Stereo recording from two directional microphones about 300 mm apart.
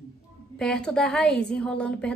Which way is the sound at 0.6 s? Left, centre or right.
Centre.